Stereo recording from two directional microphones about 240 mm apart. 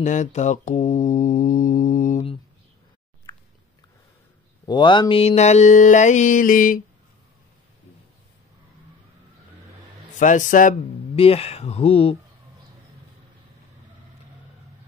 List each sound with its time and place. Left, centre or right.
0.0 s mantra: left
4.6 s mantra: centre; by 6.8 s left
10.1 s speech: left